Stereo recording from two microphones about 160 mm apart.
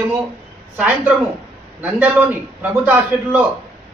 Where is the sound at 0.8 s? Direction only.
10° right (ahead or behind).